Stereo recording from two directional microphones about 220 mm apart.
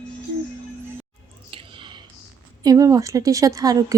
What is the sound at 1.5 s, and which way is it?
Whispering, 20° right (ahead or behind).